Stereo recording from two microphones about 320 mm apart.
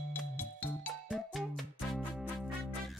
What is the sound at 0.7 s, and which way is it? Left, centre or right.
Music, centre.